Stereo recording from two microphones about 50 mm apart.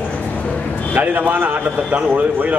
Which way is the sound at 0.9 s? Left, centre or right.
Right.